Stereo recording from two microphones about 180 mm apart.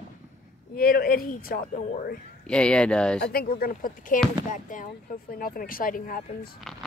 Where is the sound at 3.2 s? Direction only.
55° left (ahead or behind).